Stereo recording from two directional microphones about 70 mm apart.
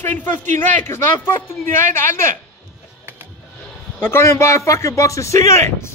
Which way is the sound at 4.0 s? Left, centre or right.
Left.